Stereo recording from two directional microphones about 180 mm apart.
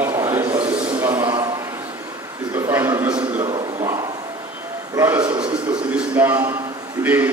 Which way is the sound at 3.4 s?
25° right (ahead or behind).